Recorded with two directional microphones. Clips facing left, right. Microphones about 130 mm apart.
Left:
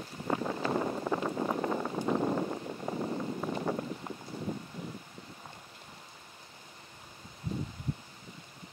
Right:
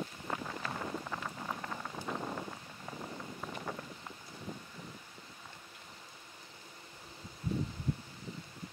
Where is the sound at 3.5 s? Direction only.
40° left (ahead or behind).